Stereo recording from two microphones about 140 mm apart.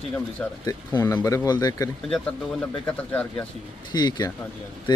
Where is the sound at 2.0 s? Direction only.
5° left (ahead or behind).